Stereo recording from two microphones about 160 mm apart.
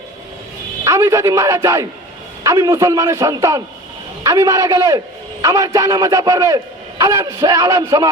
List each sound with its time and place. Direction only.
0.9 s a man's voice: 20° right (ahead or behind)